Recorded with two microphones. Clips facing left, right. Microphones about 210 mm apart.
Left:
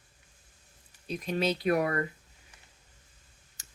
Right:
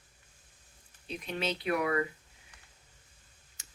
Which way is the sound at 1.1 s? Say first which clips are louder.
Left 5 dB; 40° left (ahead or behind).